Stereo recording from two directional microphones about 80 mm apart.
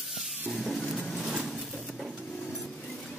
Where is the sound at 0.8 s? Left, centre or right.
Centre.